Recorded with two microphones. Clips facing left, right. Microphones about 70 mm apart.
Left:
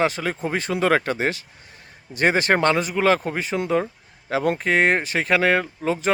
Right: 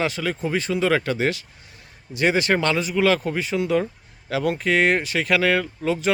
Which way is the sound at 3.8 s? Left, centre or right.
Left.